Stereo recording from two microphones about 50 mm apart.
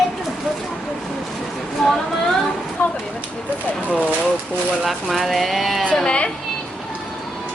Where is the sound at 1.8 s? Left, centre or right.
Centre.